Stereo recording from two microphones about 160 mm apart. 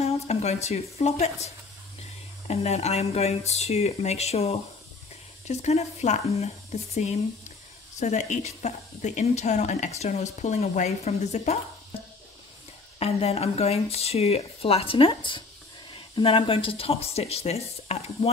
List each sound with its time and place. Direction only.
0.0 s speech: 40° left (ahead or behind)
2.4 s speech: 40° left (ahead or behind)
13.0 s speech: 40° left (ahead or behind)